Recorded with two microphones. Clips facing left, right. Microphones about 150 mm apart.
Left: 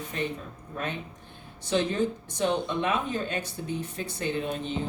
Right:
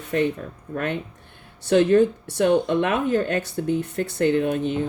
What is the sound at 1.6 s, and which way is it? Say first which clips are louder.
Speech: right 10 dB; 60° right (ahead or behind).